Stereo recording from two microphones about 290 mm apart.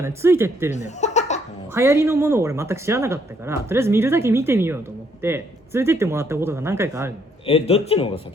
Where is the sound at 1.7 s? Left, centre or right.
Centre.